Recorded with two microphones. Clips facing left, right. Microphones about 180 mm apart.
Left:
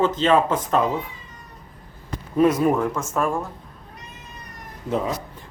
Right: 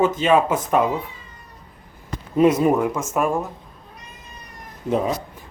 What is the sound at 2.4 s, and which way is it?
Speech, 20° right (ahead or behind).